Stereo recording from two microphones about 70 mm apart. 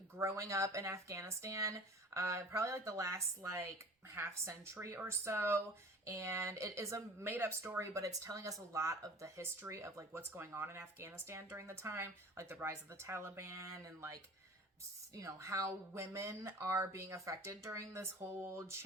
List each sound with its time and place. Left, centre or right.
0.2 s speech: right
7.3 s speech: right
7.8 s speech: right
10.3 s speech: right